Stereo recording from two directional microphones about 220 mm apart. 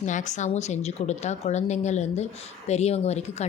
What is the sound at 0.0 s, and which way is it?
A woman's voice, 35° left (ahead or behind).